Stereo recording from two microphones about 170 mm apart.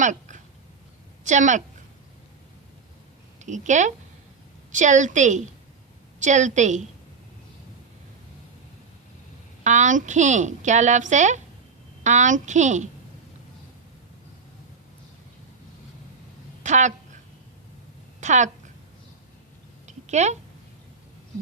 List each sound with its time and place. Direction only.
0.0 s a sound: 45° right (ahead or behind)
1.2 s a woman's voice: 45° right (ahead or behind)
3.4 s a woman's voice: 45° right (ahead or behind)
9.6 s a woman's voice: 45° right (ahead or behind)
16.6 s speech: 45° right (ahead or behind)
18.2 s a woman's voice: 45° right (ahead or behind)
19.9 s a sound: 45° right (ahead or behind)